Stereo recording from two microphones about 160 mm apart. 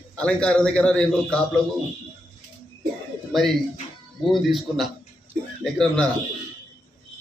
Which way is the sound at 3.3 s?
Centre (ahead or behind).